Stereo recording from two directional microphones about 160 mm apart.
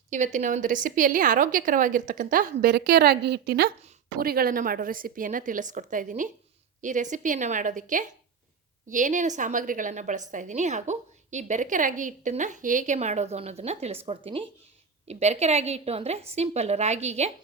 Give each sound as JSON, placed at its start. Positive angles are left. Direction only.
{"t": 0.1, "sound": "a woman's voice", "side_deg": -50}
{"t": 4.2, "sound": "a woman's voice", "side_deg": -70}